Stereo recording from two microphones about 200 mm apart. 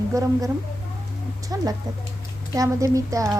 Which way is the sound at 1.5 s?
15° right (ahead or behind).